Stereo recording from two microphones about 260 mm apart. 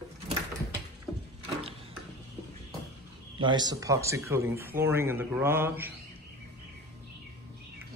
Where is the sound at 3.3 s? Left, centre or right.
Centre.